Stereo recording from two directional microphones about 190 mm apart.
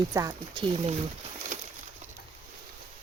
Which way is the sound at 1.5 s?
40° right (ahead or behind).